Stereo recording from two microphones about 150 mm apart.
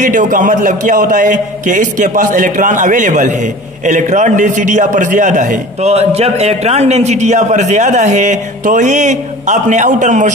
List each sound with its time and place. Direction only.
0.0 s a man's voice: 60° right (ahead or behind)